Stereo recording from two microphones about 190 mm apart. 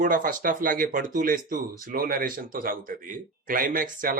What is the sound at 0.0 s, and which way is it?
Speech, 45° right (ahead or behind).